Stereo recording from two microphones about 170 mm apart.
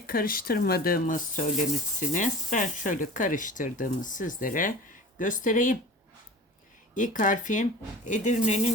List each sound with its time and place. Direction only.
0.0 s speech: 60° left (ahead or behind)
6.9 s speech: 50° left (ahead or behind)